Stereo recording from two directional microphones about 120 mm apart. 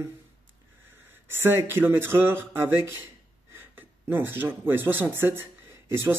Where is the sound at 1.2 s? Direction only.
20° right (ahead or behind).